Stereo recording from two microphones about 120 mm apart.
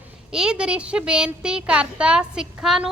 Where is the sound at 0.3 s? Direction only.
5° right (ahead or behind).